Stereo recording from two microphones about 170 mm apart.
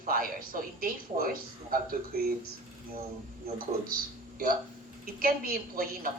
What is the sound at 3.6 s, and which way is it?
Speech, 55° right (ahead or behind).